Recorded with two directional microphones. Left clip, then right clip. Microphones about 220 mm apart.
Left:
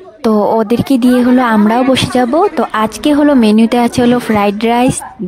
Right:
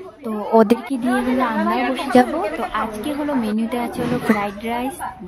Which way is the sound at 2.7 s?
45° left (ahead or behind).